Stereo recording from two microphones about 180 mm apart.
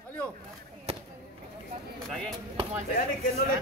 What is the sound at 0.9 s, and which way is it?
Fireworks, 35° right (ahead or behind).